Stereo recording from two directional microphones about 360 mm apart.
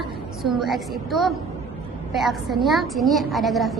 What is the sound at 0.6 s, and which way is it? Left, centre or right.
A woman's voice, centre.